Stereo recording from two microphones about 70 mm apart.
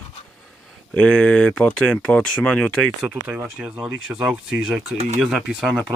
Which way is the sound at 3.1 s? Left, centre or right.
Right.